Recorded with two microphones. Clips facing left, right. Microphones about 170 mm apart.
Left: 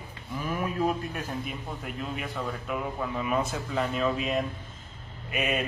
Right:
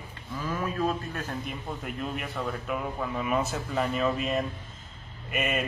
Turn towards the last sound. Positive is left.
turn(degrees=0)  # may be behind; listen again after turning